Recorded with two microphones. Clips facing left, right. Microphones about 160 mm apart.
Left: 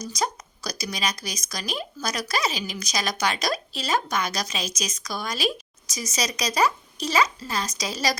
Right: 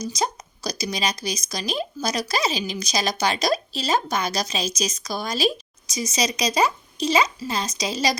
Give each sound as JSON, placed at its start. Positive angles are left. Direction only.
{"t": 0.1, "sound": "a woman's voice", "side_deg": -25}